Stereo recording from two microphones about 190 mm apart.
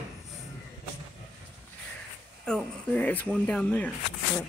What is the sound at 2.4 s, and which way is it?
Speech, 5° left (ahead or behind).